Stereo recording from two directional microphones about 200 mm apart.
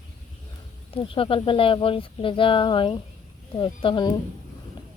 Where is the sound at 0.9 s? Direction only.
25° left (ahead or behind).